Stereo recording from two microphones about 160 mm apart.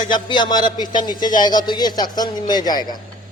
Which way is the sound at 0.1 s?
30° left (ahead or behind).